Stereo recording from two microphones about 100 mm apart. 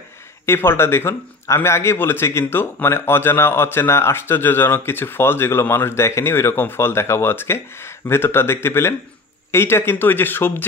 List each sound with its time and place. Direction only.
0.5 s a man's voice: 25° left (ahead or behind)